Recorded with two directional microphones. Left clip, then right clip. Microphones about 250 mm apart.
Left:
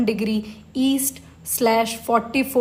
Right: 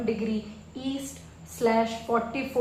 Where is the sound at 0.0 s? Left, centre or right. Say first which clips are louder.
Left 6 dB; left.